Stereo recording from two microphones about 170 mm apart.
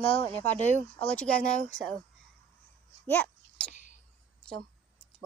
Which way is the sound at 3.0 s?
10° left (ahead or behind).